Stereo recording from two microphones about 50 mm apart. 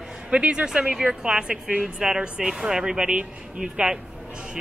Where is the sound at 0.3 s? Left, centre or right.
Right.